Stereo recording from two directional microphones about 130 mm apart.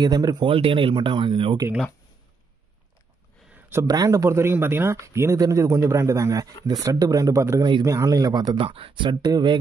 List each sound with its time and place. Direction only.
0.0 s speech: 30° right (ahead or behind)
3.5 s a sound: 15° right (ahead or behind)
3.8 s speech: 30° right (ahead or behind)
8.5 s speech: 45° right (ahead or behind)